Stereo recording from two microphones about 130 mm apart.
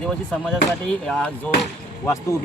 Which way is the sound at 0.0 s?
5° left (ahead or behind).